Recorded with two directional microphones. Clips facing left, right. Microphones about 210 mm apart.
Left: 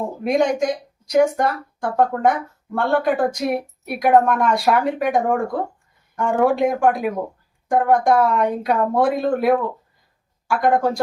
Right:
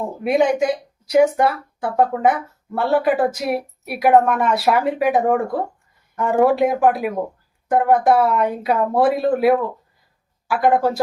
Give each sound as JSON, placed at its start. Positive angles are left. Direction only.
{"t": 0.2, "sound": "speech", "side_deg": -5}